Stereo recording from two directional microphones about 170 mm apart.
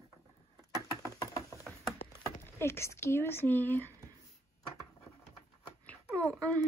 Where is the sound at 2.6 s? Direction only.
15° left (ahead or behind).